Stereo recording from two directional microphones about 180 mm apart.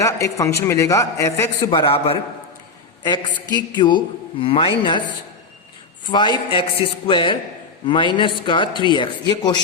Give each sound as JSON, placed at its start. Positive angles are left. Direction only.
{"t": 0.0, "sound": "a man's voice", "side_deg": 15}
{"t": 1.8, "sound": "a man's voice", "side_deg": 30}
{"t": 3.5, "sound": "a woman's voice", "side_deg": 25}
{"t": 6.1, "sound": "a woman's voice", "side_deg": 25}